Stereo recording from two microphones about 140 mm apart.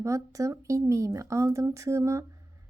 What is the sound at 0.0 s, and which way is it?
A woman's voice, 20° right (ahead or behind).